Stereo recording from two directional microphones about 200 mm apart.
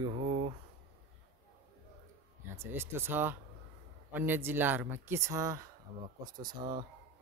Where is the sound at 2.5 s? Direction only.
10° right (ahead or behind).